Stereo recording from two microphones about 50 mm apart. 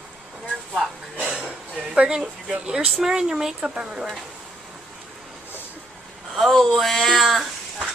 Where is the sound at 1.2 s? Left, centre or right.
Centre.